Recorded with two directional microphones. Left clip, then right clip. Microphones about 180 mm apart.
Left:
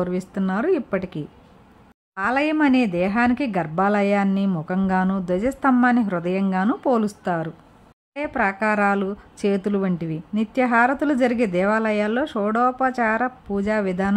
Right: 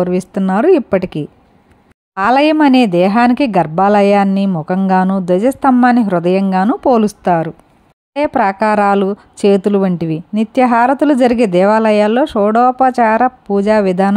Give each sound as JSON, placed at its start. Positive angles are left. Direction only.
{"t": 0.0, "sound": "speech", "side_deg": -30}